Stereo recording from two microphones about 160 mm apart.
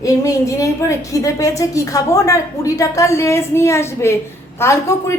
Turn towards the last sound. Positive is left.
turn(degrees=20)  # may be behind; listen again after turning